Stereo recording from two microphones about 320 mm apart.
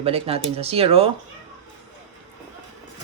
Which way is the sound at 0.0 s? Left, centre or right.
Centre.